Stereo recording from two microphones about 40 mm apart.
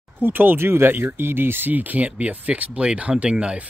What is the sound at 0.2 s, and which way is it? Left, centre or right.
Speech, right.